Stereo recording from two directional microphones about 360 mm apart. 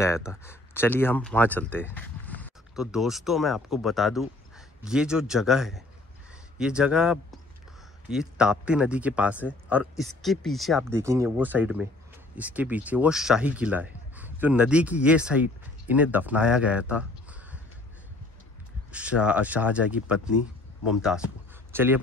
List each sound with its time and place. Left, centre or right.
0.0 s a man's voice: centre
18.9 s speech: centre